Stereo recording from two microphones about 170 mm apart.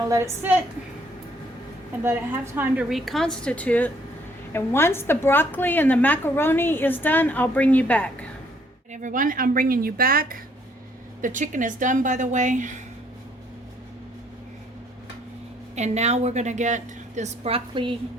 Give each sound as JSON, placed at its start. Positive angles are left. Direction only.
{"t": 0.1, "sound": "a woman's voice", "side_deg": -15}
{"t": 2.0, "sound": "a woman's voice", "side_deg": -15}
{"t": 2.9, "sound": "a woman's voice", "side_deg": 0}
{"t": 8.9, "sound": "a woman's voice", "side_deg": -50}
{"t": 15.7, "sound": "a woman's voice", "side_deg": -40}